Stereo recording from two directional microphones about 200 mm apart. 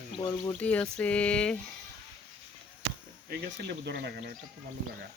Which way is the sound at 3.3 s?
55° right (ahead or behind).